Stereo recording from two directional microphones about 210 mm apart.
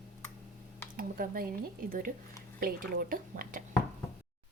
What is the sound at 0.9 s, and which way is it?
A woman's voice, 40° right (ahead or behind).